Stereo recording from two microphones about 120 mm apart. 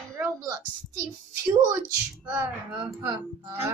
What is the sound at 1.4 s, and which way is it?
Music, 25° right (ahead or behind).